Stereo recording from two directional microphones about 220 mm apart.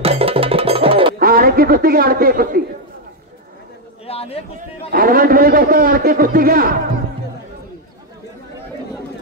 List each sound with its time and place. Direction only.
0.0 s music: 25° right (ahead or behind)
1.2 s a man's voice: 40° right (ahead or behind)
4.1 s a sound: 25° left (ahead or behind)
4.6 s a man's voice: 40° right (ahead or behind)